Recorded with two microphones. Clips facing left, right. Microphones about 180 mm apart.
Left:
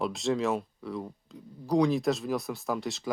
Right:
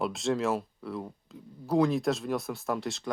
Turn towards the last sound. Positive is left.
turn(degrees=0)  # may be behind; listen again after turning